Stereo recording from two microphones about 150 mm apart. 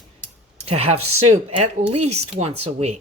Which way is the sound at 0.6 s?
40° right (ahead or behind).